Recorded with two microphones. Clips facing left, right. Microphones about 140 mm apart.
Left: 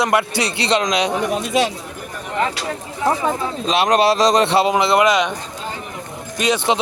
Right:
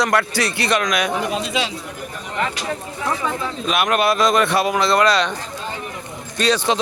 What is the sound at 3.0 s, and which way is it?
Speech, 30° left (ahead or behind).